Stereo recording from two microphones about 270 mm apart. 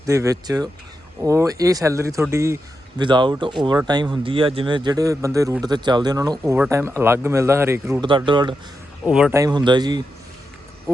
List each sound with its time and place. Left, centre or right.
0.0 s speech: centre
9.0 s speech: centre
10.9 s a sound: centre